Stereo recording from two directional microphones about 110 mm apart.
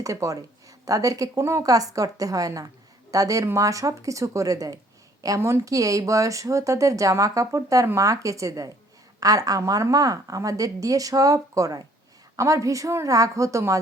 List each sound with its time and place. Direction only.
0.0 s a woman's voice: 30° right (ahead or behind)